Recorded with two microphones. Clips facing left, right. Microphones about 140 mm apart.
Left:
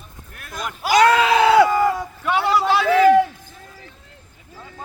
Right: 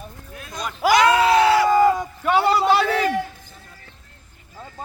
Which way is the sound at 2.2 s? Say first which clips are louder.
Right 2 dB; 40° right (ahead or behind).